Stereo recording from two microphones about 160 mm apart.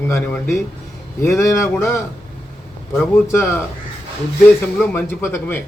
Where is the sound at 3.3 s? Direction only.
15° left (ahead or behind).